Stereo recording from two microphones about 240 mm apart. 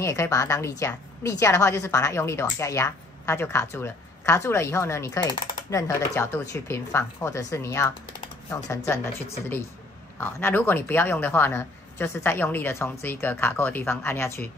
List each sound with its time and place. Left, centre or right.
0.0 s speech: centre
10.1 s speech: centre